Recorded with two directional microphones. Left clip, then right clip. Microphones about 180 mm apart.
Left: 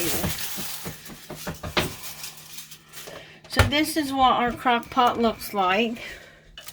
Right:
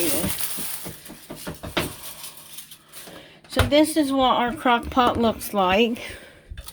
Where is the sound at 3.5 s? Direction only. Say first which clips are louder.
Right 4 dB; 35° right (ahead or behind).